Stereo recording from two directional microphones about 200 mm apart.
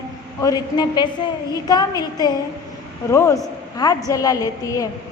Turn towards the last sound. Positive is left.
turn(degrees=15)  # may be behind; listen again after turning